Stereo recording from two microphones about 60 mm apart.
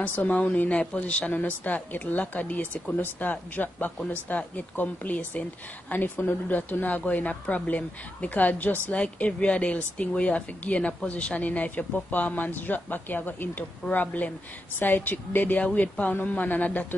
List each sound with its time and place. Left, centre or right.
0.0 s a woman's voice: left